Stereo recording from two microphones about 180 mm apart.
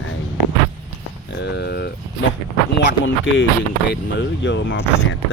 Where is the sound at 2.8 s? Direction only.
80° left.